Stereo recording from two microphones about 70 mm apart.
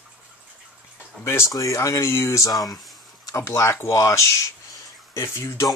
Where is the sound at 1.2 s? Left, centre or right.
Left.